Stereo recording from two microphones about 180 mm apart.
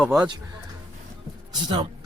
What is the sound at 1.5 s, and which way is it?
Speech, 25° right (ahead or behind).